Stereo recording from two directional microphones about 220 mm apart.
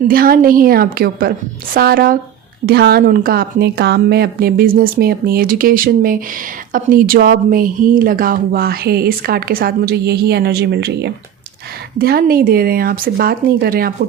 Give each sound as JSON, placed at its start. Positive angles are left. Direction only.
{"t": 0.1, "sound": "a woman's voice", "side_deg": -40}